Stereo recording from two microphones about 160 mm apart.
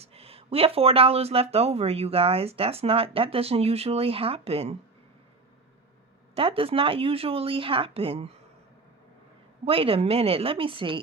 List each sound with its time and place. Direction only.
0.0 s speech: 40° right (ahead or behind)
6.3 s speech: 35° right (ahead or behind)
9.6 s speech: 35° right (ahead or behind)